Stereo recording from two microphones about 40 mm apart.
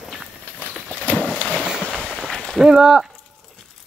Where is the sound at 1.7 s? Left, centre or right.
Centre.